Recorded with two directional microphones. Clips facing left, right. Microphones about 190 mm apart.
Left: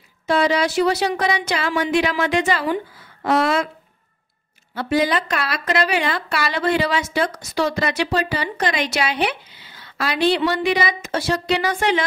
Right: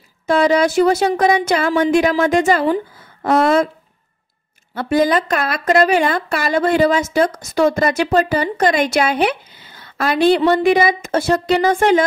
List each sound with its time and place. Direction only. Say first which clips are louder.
0.3 s a woman's voice: right 4 dB; 45° right (ahead or behind)
4.7 s a woman's voice: right 4 dB; 50° right (ahead or behind)